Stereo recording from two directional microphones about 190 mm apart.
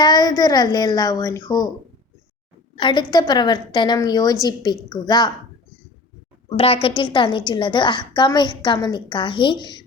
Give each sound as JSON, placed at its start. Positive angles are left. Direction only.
{"t": 0.0, "sound": "a woman's voice", "side_deg": 20}
{"t": 2.7, "sound": "a woman's voice", "side_deg": 25}
{"t": 6.6, "sound": "a woman's voice", "side_deg": 30}